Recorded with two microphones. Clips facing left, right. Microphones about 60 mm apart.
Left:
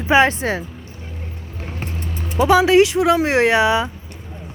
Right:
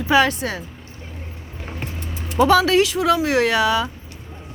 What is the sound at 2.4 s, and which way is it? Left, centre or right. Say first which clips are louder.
Speech: left 2 dB; centre.